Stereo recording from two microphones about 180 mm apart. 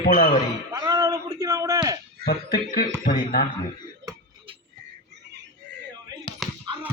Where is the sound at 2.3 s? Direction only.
55° left (ahead or behind).